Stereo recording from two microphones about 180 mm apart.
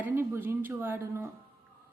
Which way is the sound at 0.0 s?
15° right (ahead or behind).